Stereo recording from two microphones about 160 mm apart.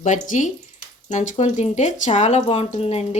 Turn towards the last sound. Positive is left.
turn(degrees=40)  # may be behind; listen again after turning